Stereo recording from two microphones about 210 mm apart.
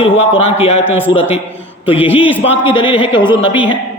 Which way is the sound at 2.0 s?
25° left (ahead or behind).